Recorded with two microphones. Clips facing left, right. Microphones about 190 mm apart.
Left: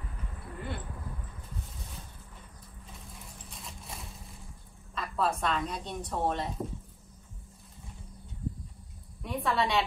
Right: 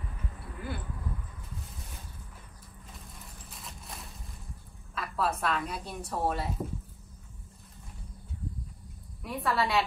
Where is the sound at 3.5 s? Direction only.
Centre (ahead or behind).